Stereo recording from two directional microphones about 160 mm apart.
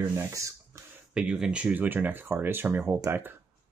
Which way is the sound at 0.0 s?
20° right (ahead or behind).